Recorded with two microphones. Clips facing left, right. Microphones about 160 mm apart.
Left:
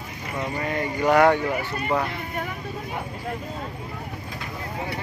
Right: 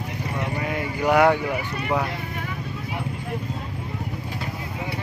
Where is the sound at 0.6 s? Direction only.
5° right (ahead or behind).